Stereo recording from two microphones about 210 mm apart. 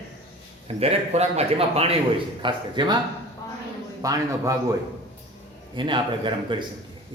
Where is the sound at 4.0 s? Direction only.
15° right (ahead or behind).